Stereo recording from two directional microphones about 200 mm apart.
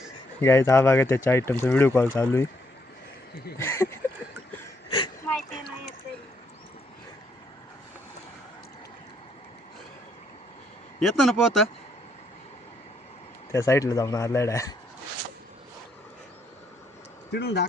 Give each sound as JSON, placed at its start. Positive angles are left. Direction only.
{"t": 0.4, "sound": "speech", "side_deg": 15}
{"t": 3.6, "sound": "a sound", "side_deg": 15}
{"t": 4.9, "sound": "a sound", "side_deg": 20}
{"t": 11.0, "sound": "speech", "side_deg": 0}
{"t": 13.5, "sound": "speech", "side_deg": 15}
{"t": 17.3, "sound": "speech", "side_deg": 55}